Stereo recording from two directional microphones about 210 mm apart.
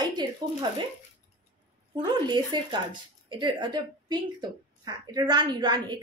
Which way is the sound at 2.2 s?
20° right (ahead or behind).